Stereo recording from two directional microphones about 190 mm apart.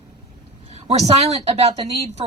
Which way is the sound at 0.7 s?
30° right (ahead or behind).